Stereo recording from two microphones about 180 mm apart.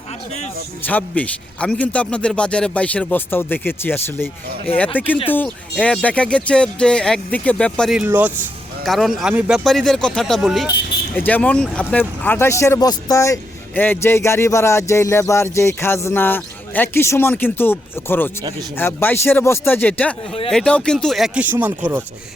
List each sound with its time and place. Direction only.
0.9 s speech: 10° left (ahead or behind)
4.7 s speech: 30° left (ahead or behind)
5.3 s speech: 10° left (ahead or behind); by 22.0 s 10° right (ahead or behind)